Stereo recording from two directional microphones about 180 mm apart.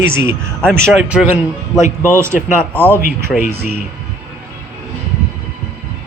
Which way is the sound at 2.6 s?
10° left (ahead or behind).